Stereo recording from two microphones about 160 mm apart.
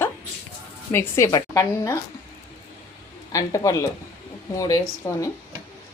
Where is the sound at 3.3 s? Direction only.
20° left (ahead or behind).